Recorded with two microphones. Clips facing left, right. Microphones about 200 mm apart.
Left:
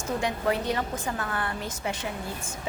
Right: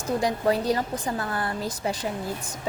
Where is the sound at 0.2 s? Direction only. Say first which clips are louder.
Right 4 dB; 35° right (ahead or behind).